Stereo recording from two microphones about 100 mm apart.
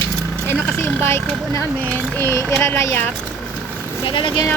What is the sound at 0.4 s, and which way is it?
Speech, 25° left (ahead or behind).